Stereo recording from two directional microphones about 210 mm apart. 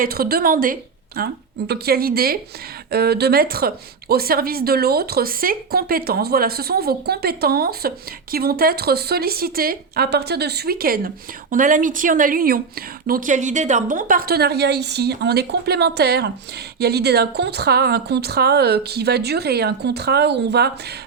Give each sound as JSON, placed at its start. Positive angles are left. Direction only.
{"t": 0.0, "sound": "a woman's voice", "side_deg": -45}